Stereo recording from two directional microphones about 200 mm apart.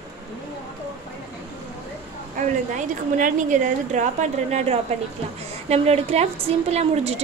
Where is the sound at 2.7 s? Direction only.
40° right (ahead or behind).